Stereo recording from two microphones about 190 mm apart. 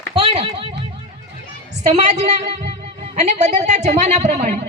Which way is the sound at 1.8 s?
35° right (ahead or behind).